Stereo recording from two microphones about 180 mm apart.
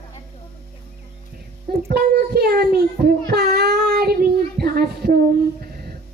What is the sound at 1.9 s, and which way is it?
Child singing, 60° right (ahead or behind).